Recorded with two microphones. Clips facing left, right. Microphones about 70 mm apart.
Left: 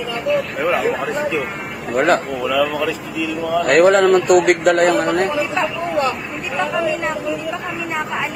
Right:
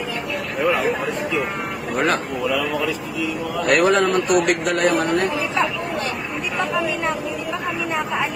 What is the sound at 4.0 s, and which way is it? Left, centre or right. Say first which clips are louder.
A man's voice: left 5 dB; left.